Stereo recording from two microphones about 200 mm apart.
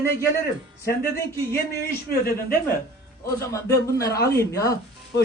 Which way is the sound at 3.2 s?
15° left (ahead or behind).